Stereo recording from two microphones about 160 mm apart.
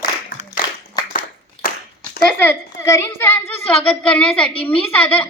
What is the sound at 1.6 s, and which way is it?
Clapping, 60° left (ahead or behind).